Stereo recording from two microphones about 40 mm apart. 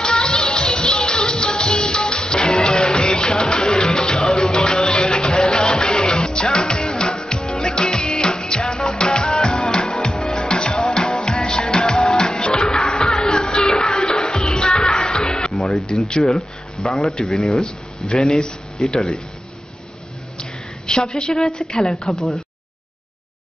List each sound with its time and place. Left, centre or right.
0.0 s music: centre
17.3 s a woman's voice: centre
17.6 s speech: centre
18.9 s speech: centre
20.3 s a sound: centre
21.2 s a woman's voice: centre